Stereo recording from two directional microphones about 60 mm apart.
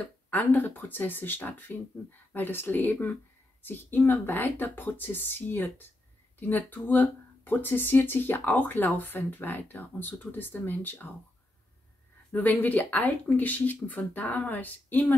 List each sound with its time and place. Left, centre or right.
0.3 s speech: left
12.3 s speech: left